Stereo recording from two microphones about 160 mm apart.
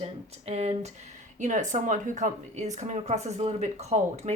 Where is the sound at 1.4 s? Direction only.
50° right (ahead or behind).